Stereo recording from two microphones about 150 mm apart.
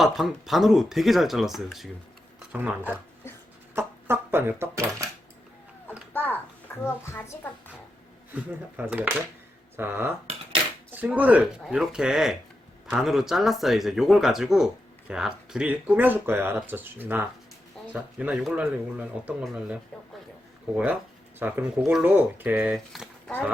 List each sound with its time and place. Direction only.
0.0 s speech: centre (ahead or behind); by 5.0 s 20° right (ahead or behind)
6.1 s a child's voice: 15° left (ahead or behind)
8.3 s speech: 10° right (ahead or behind)
21.3 s speech: 15° right (ahead or behind)